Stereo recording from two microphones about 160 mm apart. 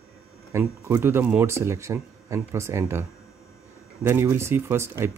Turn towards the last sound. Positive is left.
turn(degrees=-15)  # may be behind; listen again after turning